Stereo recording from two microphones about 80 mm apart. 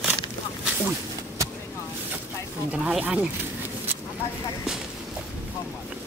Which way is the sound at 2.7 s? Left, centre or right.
Centre.